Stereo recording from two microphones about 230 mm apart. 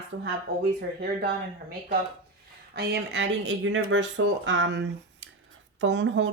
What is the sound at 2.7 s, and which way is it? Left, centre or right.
Speech, right.